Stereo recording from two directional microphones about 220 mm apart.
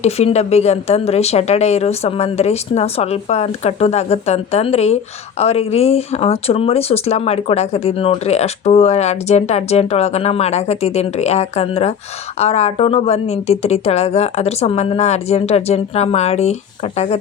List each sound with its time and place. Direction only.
0.0 s speech: 30° left (ahead or behind)